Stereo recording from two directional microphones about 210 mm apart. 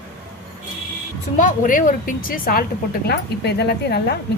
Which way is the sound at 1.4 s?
40° left (ahead or behind).